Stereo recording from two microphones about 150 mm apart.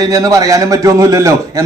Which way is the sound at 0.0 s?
25° right (ahead or behind).